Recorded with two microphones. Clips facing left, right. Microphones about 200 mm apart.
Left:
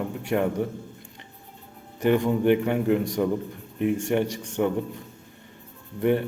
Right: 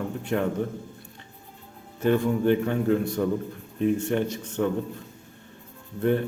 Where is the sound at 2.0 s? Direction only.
15° left (ahead or behind).